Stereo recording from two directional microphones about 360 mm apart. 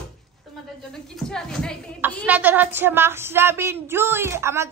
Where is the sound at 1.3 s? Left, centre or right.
Centre.